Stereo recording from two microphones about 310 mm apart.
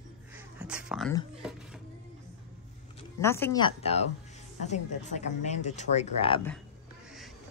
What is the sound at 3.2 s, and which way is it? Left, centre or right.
Speech, centre.